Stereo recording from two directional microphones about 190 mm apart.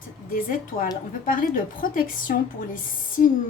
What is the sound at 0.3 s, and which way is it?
A woman's voice, 50° left (ahead or behind).